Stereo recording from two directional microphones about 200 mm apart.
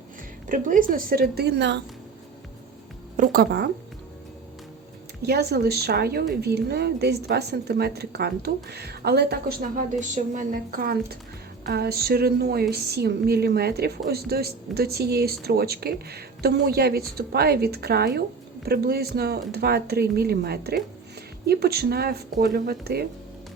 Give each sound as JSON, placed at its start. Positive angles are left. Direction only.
{"t": 0.4, "sound": "a woman's voice", "side_deg": -40}
{"t": 3.2, "sound": "a woman's voice", "side_deg": -50}
{"t": 5.2, "sound": "a woman's voice", "side_deg": -55}